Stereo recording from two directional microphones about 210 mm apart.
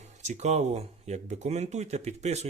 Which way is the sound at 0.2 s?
35° right (ahead or behind).